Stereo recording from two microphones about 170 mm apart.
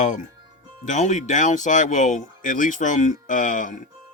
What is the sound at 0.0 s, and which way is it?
Speech, 45° left (ahead or behind).